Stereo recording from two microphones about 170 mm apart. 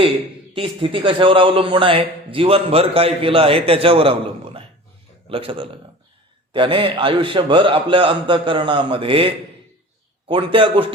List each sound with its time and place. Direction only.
0.5 s a man's voice: 30° right (ahead or behind)